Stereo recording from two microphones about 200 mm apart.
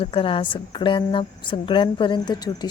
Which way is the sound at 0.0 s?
25° left (ahead or behind).